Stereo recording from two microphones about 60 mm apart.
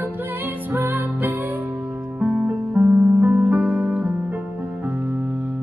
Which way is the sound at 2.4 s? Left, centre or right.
Right.